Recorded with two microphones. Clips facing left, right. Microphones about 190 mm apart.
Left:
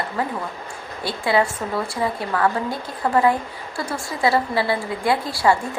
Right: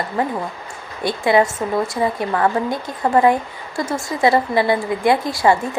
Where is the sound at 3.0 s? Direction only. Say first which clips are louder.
Right 3 dB; 25° right (ahead or behind).